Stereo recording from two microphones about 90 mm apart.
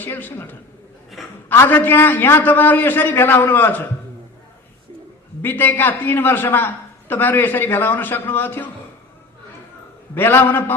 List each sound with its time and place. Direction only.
0.0 s a man's voice: 20° left (ahead or behind)
5.4 s a man's voice: 20° left (ahead or behind)
10.2 s a man's voice: 25° left (ahead or behind)